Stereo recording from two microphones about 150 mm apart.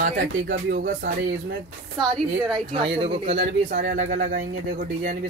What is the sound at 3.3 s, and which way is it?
Speech, 70° right (ahead or behind).